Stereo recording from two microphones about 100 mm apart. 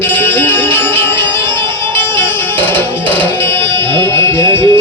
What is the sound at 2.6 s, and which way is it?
Music, 20° left (ahead or behind).